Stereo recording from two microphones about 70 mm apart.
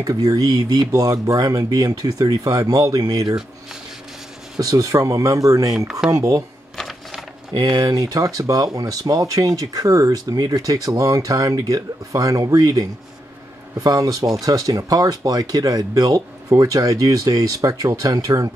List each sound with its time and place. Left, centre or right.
0.0 s speech: right
4.6 s speech: right
6.8 s typewriter: centre
7.5 s speech: right